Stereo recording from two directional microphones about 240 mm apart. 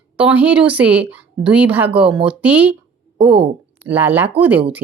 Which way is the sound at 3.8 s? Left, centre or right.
Centre.